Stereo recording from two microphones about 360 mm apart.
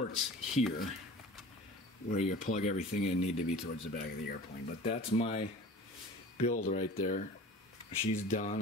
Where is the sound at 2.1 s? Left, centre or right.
Centre.